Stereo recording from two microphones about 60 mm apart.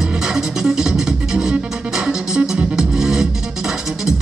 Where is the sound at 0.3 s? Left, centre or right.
Centre.